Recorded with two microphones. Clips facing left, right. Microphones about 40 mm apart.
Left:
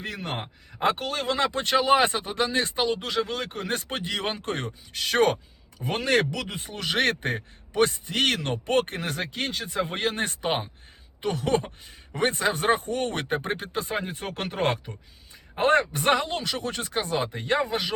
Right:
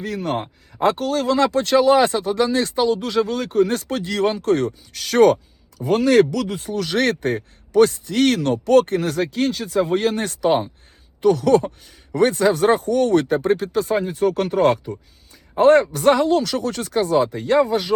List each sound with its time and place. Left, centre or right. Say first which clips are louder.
0.2 s speech: right 9 dB; centre
0.8 s speech: right 7 dB; left